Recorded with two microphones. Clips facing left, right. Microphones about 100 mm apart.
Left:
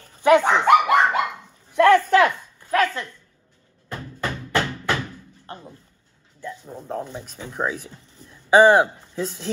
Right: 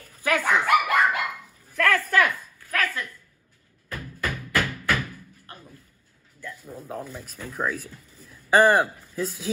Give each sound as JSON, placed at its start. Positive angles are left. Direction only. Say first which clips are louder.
{"t": 0.2, "sound": "dog", "louder": "left 7 dB", "side_deg": 25}
{"t": 1.8, "sound": "a sound", "louder": "left 7 dB", "side_deg": 25}
{"t": 5.5, "sound": "speech", "louder": "left 9 dB", "side_deg": 30}
{"t": 6.7, "sound": "speech", "louder": "left 4 dB", "side_deg": -5}
{"t": 8.1, "sound": "a sound", "louder": "left 4 dB", "side_deg": -5}
{"t": 8.8, "sound": "speech", "louder": "left 2 dB", "side_deg": 25}
{"t": 9.2, "sound": "speech", "louder": "left 1 dB", "side_deg": -5}